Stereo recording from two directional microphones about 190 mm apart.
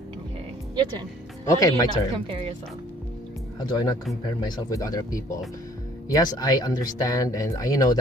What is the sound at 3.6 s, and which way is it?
Speech, 20° left (ahead or behind).